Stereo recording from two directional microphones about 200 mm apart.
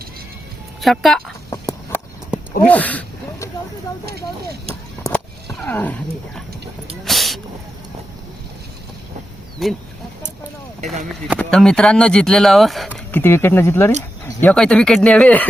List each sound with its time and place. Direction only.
0.8 s speech: centre (ahead or behind)
2.6 s a sound: 5° left (ahead or behind)
4.0 s speech: 50° right (ahead or behind)
4.7 s roaring cats: 5° left (ahead or behind)
7.0 s hiss: centre (ahead or behind)
9.6 s speech: centre (ahead or behind)
11.1 s speech: centre (ahead or behind)